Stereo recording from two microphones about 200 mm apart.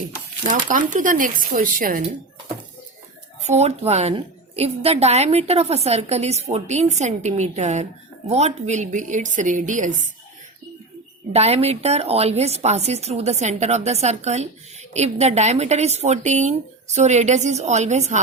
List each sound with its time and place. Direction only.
0.4 s speech: 40° right (ahead or behind)
3.4 s a woman's voice: 35° right (ahead or behind)
11.3 s a woman's voice: 30° right (ahead or behind)